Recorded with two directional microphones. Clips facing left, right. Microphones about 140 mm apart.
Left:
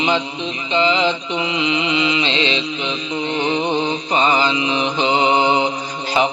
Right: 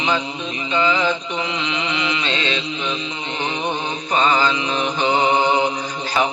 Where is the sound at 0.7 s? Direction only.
20° left (ahead or behind).